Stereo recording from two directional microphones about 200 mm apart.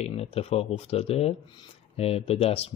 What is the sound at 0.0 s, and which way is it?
Speech, 30° left (ahead or behind).